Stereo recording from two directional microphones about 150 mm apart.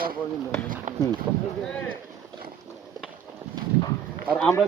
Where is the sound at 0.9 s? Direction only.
55° right (ahead or behind).